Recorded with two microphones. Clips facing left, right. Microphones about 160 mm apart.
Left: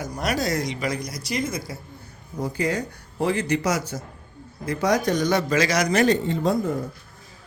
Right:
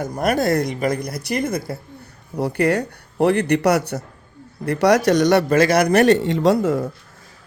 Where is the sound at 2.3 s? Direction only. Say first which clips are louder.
Right 6 dB; 70° right (ahead or behind).